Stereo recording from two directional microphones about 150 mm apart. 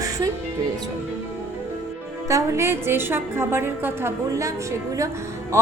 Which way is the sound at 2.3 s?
20° right (ahead or behind).